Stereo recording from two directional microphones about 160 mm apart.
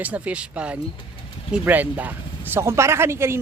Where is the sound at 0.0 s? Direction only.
10° right (ahead or behind).